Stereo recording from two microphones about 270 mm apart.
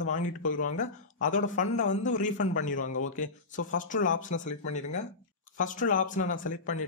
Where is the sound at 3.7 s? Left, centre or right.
Left.